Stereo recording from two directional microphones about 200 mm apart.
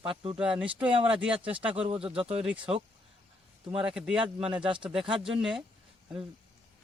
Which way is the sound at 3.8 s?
5° right (ahead or behind).